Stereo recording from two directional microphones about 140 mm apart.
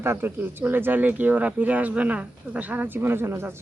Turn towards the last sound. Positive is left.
turn(degrees=-15)  # may be behind; listen again after turning